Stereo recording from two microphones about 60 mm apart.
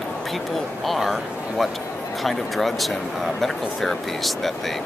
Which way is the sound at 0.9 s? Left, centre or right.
Centre.